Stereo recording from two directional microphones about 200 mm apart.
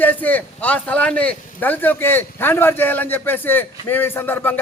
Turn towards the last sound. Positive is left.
turn(degrees=10)  # may be behind; listen again after turning